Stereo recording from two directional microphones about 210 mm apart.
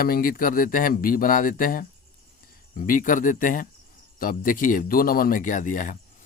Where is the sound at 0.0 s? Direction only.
40° left (ahead or behind).